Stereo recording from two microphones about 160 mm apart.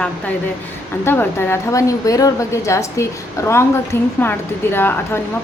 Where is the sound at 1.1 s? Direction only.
15° left (ahead or behind).